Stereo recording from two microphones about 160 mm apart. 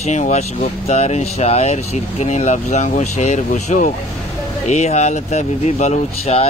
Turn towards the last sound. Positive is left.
turn(degrees=45)  # may be behind; listen again after turning